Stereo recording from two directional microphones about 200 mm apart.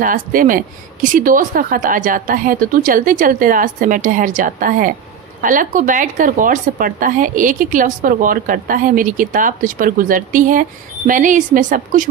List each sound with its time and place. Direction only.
0.0 s a woman's voice: 45° right (ahead or behind)